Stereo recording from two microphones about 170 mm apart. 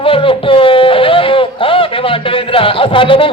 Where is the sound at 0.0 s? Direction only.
30° left (ahead or behind).